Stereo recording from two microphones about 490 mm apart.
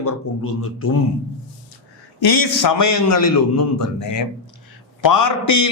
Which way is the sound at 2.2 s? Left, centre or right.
Left.